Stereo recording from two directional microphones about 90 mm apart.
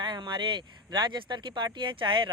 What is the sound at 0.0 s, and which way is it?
Speech, 60° right (ahead or behind).